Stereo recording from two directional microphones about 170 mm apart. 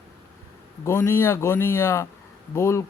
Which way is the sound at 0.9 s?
15° left (ahead or behind).